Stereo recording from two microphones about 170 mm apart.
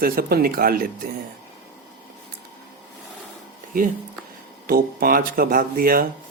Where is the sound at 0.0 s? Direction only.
65° right (ahead or behind).